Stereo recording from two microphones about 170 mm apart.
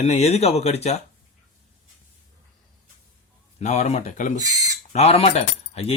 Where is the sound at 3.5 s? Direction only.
40° left (ahead or behind).